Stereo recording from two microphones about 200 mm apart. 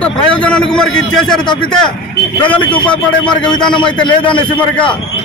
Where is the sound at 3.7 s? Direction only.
25° left (ahead or behind).